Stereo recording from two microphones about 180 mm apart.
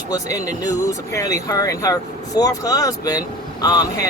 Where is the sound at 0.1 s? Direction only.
20° left (ahead or behind).